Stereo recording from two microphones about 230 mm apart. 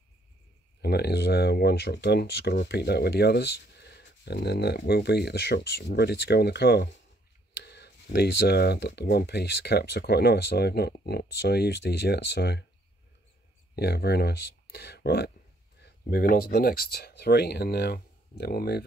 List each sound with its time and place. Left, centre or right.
0.8 s speech: left
13.7 s speech: left